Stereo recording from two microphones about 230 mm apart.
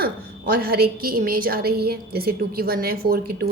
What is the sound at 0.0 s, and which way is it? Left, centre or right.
A woman's voice, right.